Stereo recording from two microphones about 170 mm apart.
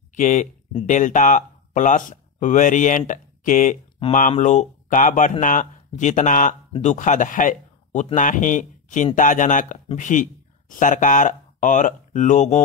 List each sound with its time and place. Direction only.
0.1 s speech: 50° left (ahead or behind)